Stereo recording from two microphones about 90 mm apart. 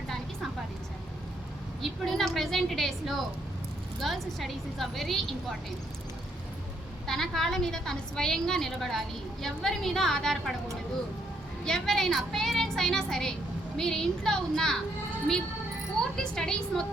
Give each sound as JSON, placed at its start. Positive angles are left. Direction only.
{"t": 1.8, "sound": "a woman's voice", "side_deg": 0}
{"t": 7.1, "sound": "a woman's voice", "side_deg": 5}
{"t": 11.6, "sound": "a woman's voice", "side_deg": 5}
{"t": 16.1, "sound": "a woman's voice", "side_deg": 5}